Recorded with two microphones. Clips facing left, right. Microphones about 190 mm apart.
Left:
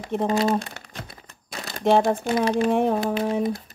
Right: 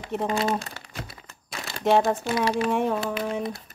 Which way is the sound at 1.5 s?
35° left (ahead or behind).